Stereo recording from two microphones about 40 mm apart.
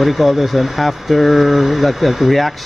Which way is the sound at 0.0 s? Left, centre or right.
Centre.